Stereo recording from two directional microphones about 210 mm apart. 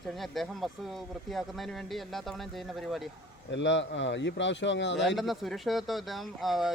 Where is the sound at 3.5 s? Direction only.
60° left (ahead or behind).